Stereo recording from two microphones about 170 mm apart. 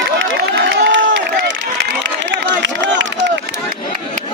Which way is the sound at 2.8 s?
90° right.